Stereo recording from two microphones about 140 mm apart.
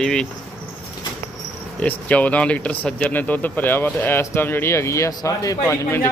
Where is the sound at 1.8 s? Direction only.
10° left (ahead or behind).